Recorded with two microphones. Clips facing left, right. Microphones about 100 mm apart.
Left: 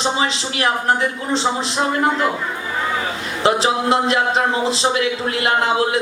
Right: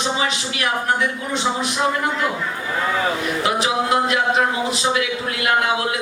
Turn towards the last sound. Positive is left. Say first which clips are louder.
# left 2 dB
turn(degrees=30)  # may be behind; listen again after turning